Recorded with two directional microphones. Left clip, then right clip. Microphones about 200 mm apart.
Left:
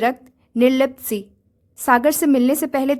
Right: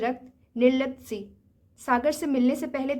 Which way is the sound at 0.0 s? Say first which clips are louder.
Left 9 dB; 50° left (ahead or behind).